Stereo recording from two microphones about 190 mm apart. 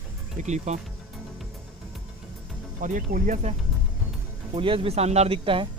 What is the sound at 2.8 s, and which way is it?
Speech, 45° right (ahead or behind).